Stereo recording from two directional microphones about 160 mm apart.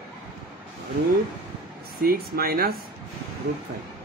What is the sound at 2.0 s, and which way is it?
Speech, 70° right (ahead or behind).